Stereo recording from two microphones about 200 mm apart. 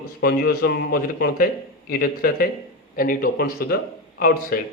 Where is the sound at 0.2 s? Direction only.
50° left (ahead or behind).